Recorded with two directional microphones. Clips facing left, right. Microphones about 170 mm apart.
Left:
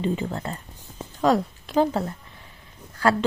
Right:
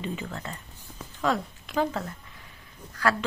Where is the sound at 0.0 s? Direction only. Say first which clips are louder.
Left 8 dB; 35° left (ahead or behind).